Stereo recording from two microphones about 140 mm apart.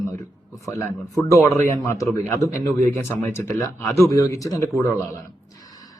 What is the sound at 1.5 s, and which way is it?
A man's voice, 20° left (ahead or behind).